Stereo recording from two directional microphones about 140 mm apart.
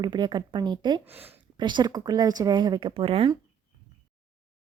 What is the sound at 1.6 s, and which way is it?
A woman's voice, 30° right (ahead or behind).